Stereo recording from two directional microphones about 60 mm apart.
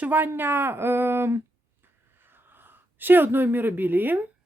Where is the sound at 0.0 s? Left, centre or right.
Right.